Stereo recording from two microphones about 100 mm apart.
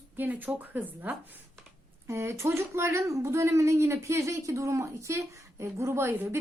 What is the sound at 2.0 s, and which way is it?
A woman's voice, 30° right (ahead or behind).